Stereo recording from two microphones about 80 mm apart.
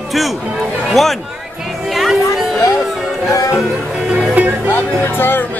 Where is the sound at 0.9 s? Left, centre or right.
Centre.